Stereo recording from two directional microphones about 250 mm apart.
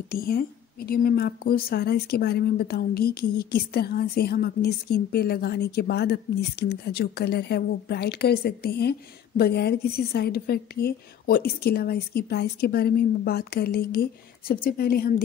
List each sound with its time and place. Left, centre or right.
0.1 s a woman's voice: left